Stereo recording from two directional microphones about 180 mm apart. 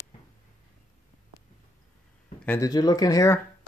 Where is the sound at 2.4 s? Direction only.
15° left (ahead or behind).